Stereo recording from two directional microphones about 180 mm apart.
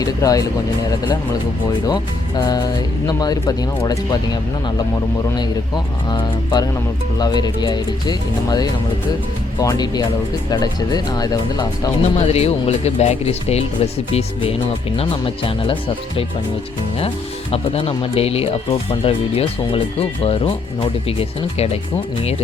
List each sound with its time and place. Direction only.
0.0 s speech: 20° left (ahead or behind)
5.4 s speech: 25° left (ahead or behind)
12.1 s speech: 35° left (ahead or behind)
17.5 s speech: 30° left (ahead or behind)